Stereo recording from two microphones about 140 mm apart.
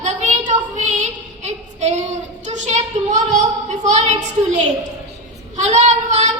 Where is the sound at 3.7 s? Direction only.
60° right (ahead or behind).